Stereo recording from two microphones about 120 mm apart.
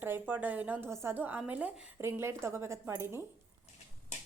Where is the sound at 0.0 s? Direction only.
15° right (ahead or behind).